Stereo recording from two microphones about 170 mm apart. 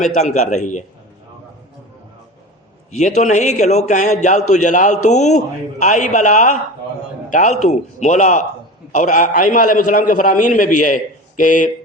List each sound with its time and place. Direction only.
0.0 s a man's voice: 40° left (ahead or behind)
3.0 s a man's voice: 45° left (ahead or behind)